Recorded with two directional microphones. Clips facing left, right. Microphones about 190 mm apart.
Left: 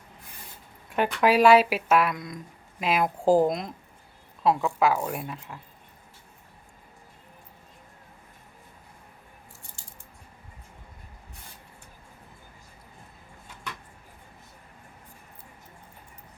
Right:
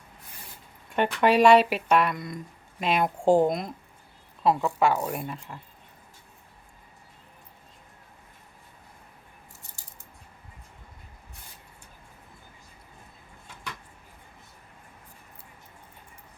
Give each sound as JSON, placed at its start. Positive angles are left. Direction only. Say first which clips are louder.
{"t": 0.9, "sound": "speech", "louder": "even", "side_deg": 0}